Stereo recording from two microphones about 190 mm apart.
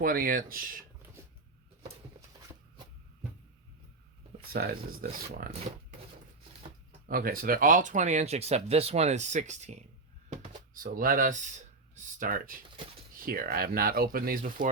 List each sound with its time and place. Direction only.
0.0 s speech: 50° right (ahead or behind)
4.4 s speech: 50° right (ahead or behind)
7.1 s speech: 50° right (ahead or behind)
10.2 s a sound: 35° right (ahead or behind)
10.8 s speech: 50° right (ahead or behind)